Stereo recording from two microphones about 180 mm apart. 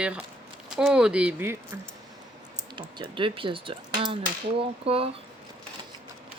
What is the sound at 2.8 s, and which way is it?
Speech, 25° right (ahead or behind).